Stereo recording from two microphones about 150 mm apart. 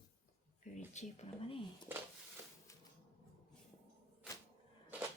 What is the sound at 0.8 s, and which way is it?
Speech, 50° left (ahead or behind).